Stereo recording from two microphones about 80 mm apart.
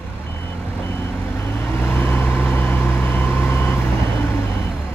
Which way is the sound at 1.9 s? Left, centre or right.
Left.